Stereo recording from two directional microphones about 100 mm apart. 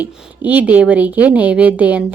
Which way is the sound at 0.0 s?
15° right (ahead or behind).